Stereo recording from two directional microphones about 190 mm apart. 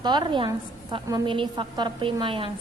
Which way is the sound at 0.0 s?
20° right (ahead or behind).